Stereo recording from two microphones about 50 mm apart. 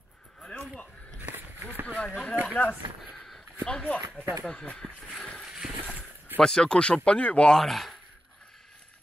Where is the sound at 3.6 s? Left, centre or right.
Centre.